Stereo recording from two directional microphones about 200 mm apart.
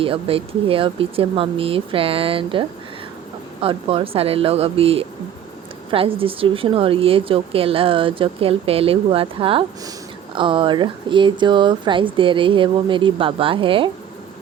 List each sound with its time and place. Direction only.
0.0 s a woman's voice: 25° right (ahead or behind)